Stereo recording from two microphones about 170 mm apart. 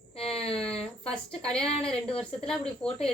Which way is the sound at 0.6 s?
5° left (ahead or behind).